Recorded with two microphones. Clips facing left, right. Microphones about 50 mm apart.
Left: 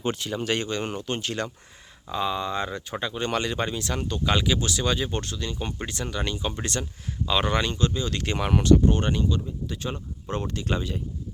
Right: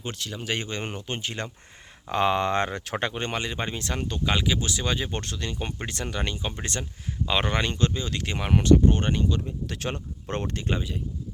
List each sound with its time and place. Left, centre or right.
0.0 s speech: centre
0.4 s speech: centre
2.1 s speech: right
3.3 s speech: centre
3.8 s speech: right
4.3 s speech: centre
5.2 s speech: right
8.1 s speech: centre
8.6 s speech: right
9.3 s speech: right
9.9 s speech: right